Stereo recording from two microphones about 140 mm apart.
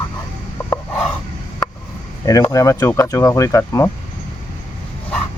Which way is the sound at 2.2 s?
25° left (ahead or behind).